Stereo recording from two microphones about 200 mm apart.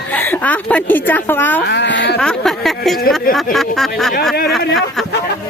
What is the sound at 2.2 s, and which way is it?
A woman's voice, 5° left (ahead or behind).